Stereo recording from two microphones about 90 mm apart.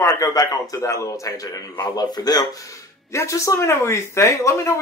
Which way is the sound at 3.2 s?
35° left (ahead or behind).